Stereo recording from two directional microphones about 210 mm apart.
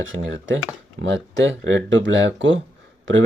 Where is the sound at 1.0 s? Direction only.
60° right (ahead or behind).